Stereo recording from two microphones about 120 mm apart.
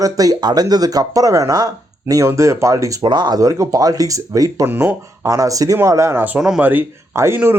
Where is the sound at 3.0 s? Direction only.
35° right (ahead or behind).